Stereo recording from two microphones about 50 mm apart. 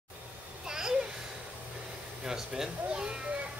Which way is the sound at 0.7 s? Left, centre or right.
Centre.